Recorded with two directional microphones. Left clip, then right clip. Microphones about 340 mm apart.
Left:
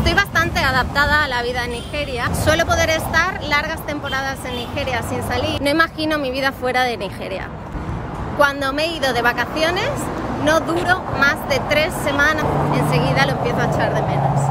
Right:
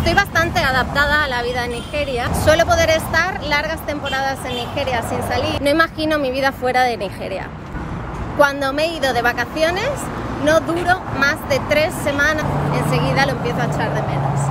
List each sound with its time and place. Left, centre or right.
0.0 s a woman's voice: centre
8.4 s a woman's voice: centre